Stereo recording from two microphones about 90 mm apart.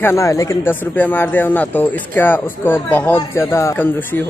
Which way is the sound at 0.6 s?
20° left (ahead or behind).